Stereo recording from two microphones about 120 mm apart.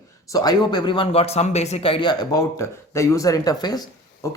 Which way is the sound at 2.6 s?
25° left (ahead or behind).